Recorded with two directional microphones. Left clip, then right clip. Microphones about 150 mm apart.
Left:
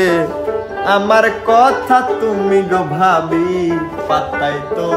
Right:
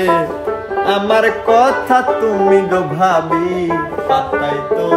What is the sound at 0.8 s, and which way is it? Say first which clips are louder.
Music: left 2 dB; centre (ahead or behind).